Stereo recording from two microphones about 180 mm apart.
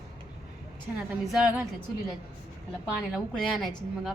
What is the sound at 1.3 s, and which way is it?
Speech, 5° right (ahead or behind).